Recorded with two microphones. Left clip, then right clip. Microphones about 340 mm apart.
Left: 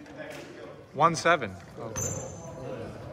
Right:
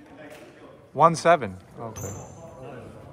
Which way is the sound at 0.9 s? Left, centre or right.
Centre.